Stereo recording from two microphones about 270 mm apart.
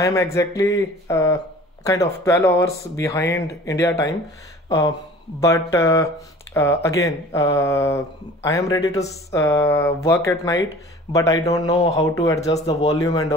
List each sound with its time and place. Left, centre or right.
0.0 s speech: centre